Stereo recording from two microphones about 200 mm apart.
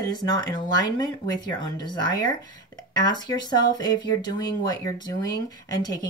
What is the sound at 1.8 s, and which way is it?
Speech, 20° left (ahead or behind).